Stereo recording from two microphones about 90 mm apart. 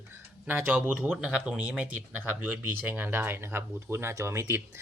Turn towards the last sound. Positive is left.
turn(degrees=-30)  # may be behind; listen again after turning